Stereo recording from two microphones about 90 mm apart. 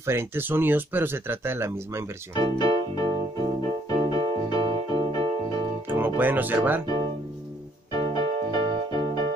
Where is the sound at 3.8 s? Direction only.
45° left (ahead or behind).